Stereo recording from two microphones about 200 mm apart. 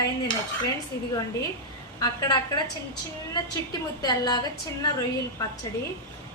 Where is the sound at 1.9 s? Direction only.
20° left (ahead or behind).